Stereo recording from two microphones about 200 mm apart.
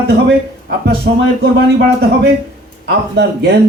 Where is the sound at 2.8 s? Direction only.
55° right (ahead or behind).